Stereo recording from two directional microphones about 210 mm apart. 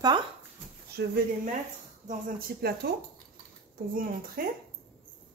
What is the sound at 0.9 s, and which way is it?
Speech, 50° right (ahead or behind).